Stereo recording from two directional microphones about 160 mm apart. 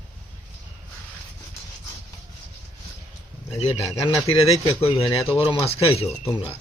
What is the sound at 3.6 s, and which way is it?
Speech, 40° left (ahead or behind).